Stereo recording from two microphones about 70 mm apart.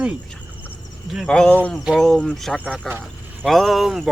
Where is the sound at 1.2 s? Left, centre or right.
Centre.